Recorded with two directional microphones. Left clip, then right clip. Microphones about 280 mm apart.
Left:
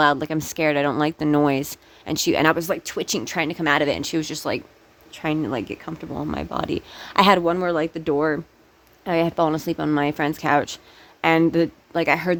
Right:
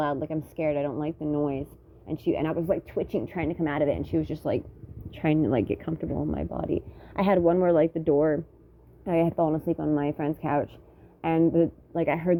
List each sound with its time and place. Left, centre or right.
0.0 s speech: left
0.3 s speech: left
0.6 s speech: left
1.2 s speech: left
2.0 s speech: left; by 6.1 s centre
6.3 s speech: centre